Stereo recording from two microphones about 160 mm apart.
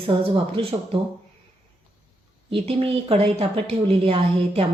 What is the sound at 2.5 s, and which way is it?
Speech, 35° right (ahead or behind).